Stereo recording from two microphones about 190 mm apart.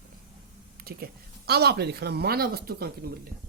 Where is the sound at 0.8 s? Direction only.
55° right (ahead or behind).